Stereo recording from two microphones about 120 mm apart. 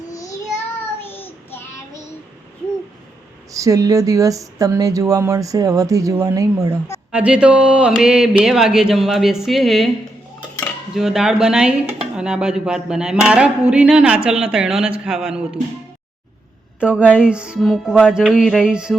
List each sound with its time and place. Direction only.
1.0 s child singing: 20° left (ahead or behind)
3.5 s speech: 30° right (ahead or behind)
7.1 s speech: 10° right (ahead or behind)
10.9 s speech: 5° right (ahead or behind)
16.8 s speech: 10° right (ahead or behind)